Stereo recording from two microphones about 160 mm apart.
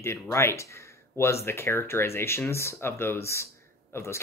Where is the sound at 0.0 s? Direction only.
15° left (ahead or behind).